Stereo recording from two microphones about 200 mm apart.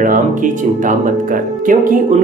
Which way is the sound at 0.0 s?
40° right (ahead or behind).